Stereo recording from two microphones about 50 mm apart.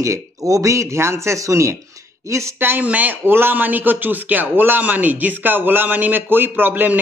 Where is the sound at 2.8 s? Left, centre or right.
Right.